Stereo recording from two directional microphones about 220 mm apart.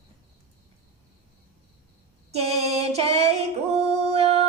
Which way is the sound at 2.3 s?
30° right (ahead or behind).